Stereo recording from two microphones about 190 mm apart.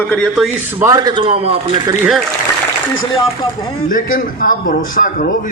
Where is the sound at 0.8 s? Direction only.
20° right (ahead or behind).